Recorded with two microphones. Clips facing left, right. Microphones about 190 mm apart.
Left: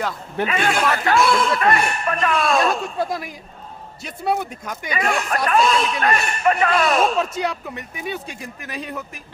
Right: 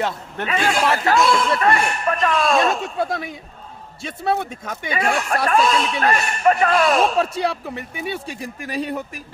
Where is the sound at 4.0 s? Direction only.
25° right (ahead or behind).